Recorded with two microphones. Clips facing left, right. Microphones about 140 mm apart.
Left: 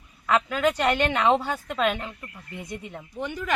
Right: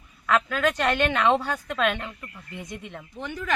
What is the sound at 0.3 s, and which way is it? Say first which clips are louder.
Speech: left 1 dB; 15° left (ahead or behind).